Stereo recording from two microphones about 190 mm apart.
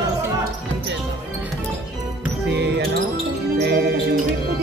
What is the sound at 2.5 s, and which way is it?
Music, 60° right (ahead or behind).